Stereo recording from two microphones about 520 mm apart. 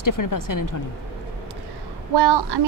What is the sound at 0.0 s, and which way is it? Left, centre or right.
Speech, left.